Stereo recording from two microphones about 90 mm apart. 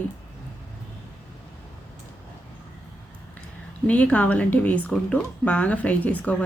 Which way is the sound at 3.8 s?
15° left (ahead or behind).